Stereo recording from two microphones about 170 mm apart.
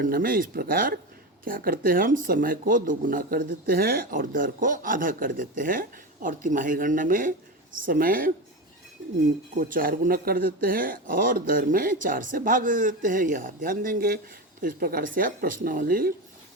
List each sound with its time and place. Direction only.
0.0 s speech: 55° right (ahead or behind)
9.6 s speech: 55° right (ahead or behind)